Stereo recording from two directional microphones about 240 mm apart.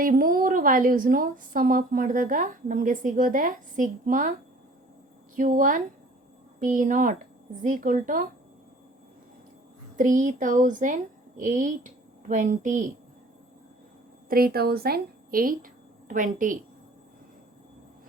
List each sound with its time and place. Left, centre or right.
0.0 s a woman's voice: right
5.4 s a woman's voice: right
10.0 s a woman's voice: right
14.3 s speech: right